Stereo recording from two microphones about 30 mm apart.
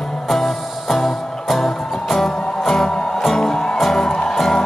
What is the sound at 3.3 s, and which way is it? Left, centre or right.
Music, centre.